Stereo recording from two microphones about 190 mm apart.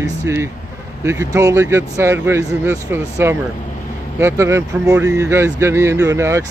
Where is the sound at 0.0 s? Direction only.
15° right (ahead or behind).